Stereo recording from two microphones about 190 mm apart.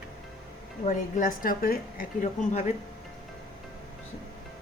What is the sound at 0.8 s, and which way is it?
Speech, 45° left (ahead or behind).